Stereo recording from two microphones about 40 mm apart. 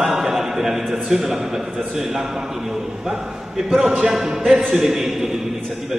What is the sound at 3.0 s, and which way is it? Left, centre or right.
A man's voice, centre.